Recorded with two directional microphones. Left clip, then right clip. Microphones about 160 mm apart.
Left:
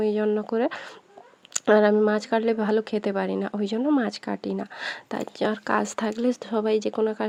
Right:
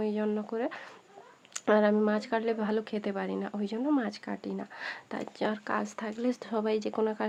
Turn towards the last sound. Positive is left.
turn(degrees=25)  # may be behind; listen again after turning